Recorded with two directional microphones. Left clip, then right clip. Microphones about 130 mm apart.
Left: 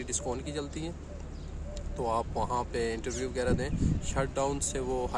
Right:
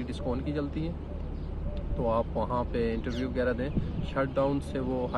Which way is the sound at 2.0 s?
30° left (ahead or behind).